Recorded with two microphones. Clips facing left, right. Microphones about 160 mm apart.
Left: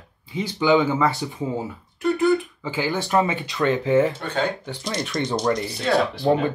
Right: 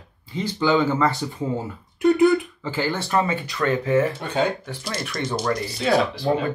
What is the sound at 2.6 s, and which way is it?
Speech, 10° left (ahead or behind).